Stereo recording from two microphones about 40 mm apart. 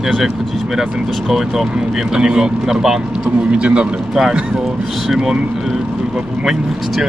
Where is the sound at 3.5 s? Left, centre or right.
Right.